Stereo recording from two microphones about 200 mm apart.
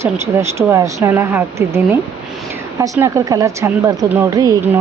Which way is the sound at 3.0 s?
15° right (ahead or behind).